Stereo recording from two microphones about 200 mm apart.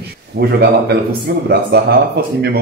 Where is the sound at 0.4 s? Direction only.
55° right (ahead or behind).